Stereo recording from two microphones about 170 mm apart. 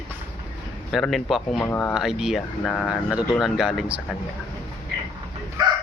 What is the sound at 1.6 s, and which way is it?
Speech, 10° left (ahead or behind).